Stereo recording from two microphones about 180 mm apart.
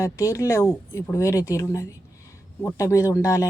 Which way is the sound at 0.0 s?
15° left (ahead or behind).